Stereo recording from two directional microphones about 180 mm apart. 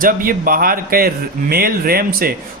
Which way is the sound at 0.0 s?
50° right (ahead or behind).